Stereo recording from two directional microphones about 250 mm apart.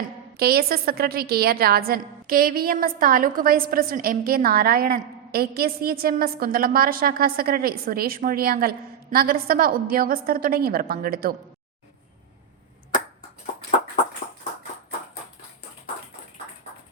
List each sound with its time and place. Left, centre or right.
0.3 s a woman's voice: right